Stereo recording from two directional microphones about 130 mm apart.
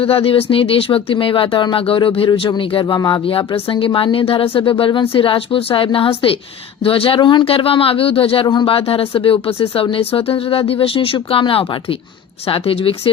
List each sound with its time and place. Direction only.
0.0 s speech: 45° left (ahead or behind)